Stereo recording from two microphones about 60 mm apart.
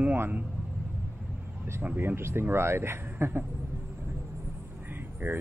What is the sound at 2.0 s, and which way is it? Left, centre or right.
Speech, right.